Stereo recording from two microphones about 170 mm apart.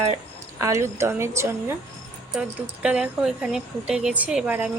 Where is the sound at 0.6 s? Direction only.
15° right (ahead or behind).